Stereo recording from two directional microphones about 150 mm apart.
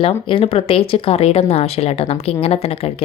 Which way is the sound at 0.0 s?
40° left (ahead or behind).